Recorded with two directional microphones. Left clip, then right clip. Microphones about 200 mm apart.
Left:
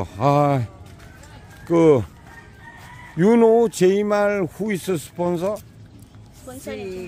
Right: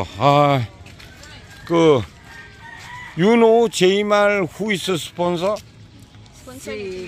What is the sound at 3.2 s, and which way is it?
A man's voice, 10° left (ahead or behind).